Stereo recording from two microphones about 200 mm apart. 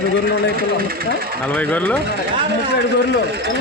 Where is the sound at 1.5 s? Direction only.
5° left (ahead or behind).